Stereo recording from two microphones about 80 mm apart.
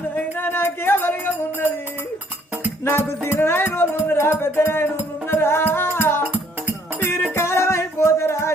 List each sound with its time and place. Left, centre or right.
0.3 s music: left
2.8 s music: left
6.2 s music: right
7.0 s music: left